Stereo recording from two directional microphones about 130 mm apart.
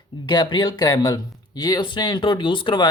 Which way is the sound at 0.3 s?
35° left (ahead or behind).